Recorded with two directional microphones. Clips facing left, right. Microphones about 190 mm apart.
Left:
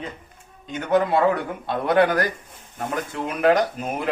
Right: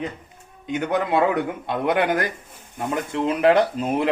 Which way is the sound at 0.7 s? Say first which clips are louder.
Left 2 dB; 15° right (ahead or behind).